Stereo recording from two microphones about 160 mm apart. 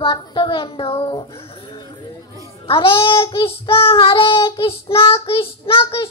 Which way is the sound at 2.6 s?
35° left (ahead or behind).